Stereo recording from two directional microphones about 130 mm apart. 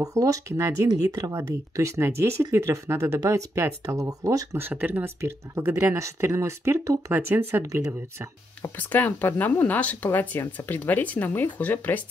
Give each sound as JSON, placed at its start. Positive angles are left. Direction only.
{"t": 0.0, "sound": "speech", "side_deg": -25}
{"t": 4.6, "sound": "speech", "side_deg": -15}
{"t": 8.6, "sound": "speech", "side_deg": 15}